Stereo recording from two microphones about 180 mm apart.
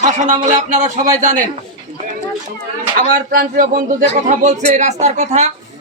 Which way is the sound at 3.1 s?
50° right (ahead or behind).